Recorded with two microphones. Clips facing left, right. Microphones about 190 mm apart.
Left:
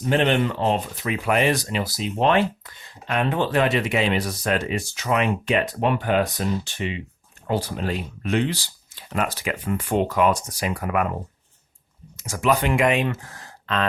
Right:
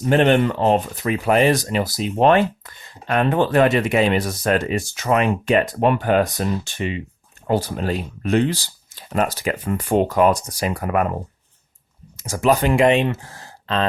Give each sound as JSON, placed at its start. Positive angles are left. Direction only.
{"t": 0.0, "sound": "speech", "side_deg": -50}
{"t": 12.1, "sound": "speech", "side_deg": -35}